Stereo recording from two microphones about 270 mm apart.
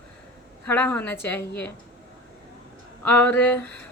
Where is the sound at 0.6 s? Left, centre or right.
Centre.